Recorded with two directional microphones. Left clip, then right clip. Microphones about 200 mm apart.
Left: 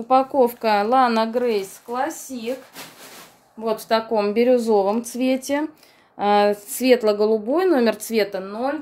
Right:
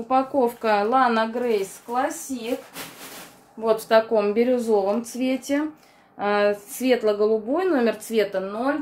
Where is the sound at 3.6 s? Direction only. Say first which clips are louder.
Right 3 dB; 35° left (ahead or behind).